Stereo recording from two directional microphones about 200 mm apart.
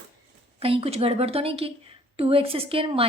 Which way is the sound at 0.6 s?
30° right (ahead or behind).